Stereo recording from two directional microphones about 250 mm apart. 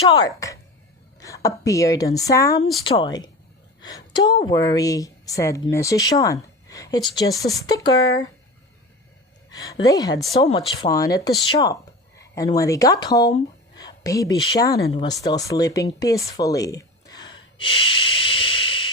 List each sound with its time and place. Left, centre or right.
0.1 s a woman's voice: centre
9.5 s a woman's voice: centre